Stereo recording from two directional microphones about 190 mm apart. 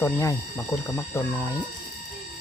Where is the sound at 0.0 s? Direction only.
15° left (ahead or behind).